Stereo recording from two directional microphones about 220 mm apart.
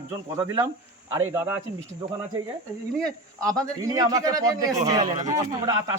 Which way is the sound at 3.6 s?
15° right (ahead or behind).